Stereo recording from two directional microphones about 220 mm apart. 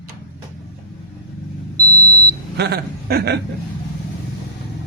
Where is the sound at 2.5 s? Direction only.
45° right (ahead or behind).